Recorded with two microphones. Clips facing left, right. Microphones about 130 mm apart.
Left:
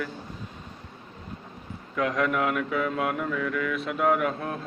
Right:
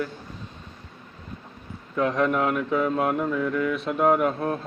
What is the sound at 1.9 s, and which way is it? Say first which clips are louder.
Mantra: right 3 dB; 25° right (ahead or behind).